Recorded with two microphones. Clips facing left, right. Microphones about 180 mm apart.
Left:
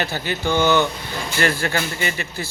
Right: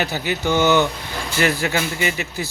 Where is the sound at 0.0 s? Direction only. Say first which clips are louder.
Right 1 dB; 15° right (ahead or behind).